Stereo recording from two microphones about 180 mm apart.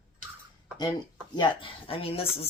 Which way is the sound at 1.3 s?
25° left (ahead or behind).